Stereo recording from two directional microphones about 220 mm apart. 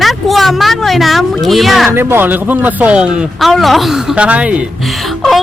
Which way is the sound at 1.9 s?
10° right (ahead or behind).